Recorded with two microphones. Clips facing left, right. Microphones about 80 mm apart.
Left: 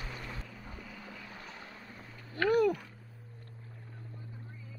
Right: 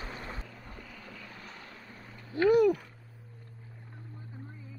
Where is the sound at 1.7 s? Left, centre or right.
Centre.